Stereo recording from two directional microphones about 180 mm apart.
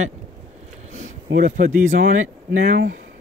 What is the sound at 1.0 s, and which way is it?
Speech, 50° right (ahead or behind).